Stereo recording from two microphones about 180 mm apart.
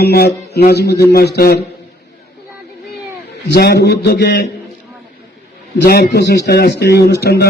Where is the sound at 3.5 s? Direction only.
65° left (ahead or behind).